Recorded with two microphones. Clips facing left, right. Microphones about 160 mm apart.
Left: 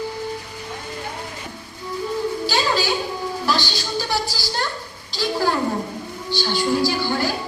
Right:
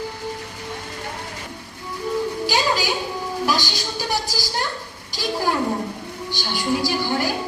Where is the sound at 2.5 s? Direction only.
15° right (ahead or behind).